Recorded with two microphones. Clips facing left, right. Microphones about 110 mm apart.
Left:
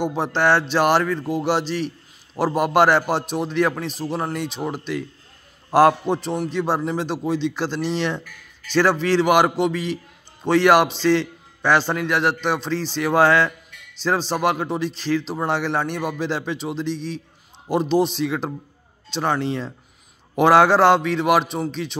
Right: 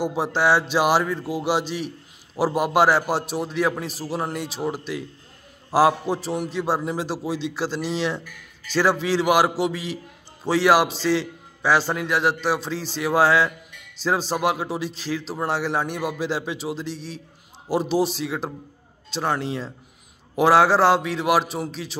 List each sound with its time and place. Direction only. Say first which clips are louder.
0.0 s a man's voice: left 1 dB; 5° right (ahead or behind)